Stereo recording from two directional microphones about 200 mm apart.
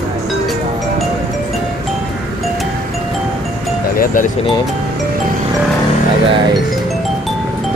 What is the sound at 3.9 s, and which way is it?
Music, 45° left (ahead or behind).